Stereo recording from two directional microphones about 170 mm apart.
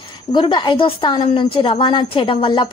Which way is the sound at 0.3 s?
25° left (ahead or behind).